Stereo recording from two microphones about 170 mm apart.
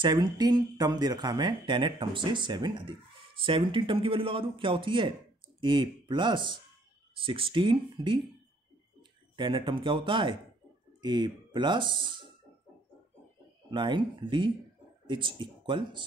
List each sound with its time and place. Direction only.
0.0 s speech: 25° right (ahead or behind)
9.4 s speech: 30° right (ahead or behind)
13.7 s speech: 25° right (ahead or behind)
15.0 s speech: 30° right (ahead or behind)